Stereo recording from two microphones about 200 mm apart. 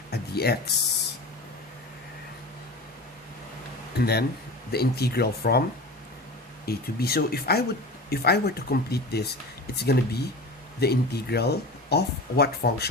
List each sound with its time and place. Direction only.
0.1 s speech: 50° left (ahead or behind)
3.9 s speech: 55° left (ahead or behind)
6.7 s speech: 50° left (ahead or behind)